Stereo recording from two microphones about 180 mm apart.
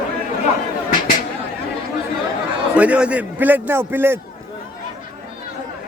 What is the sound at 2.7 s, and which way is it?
A man's voice, 5° right (ahead or behind).